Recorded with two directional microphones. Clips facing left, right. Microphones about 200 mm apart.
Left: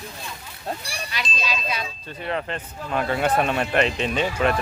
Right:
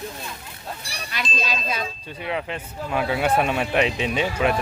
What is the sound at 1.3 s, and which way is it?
Ding, 45° right (ahead or behind).